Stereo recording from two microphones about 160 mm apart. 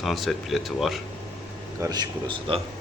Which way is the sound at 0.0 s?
Centre (ahead or behind).